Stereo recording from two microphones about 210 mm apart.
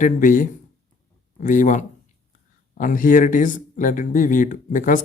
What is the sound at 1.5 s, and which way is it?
Speech, 35° left (ahead or behind).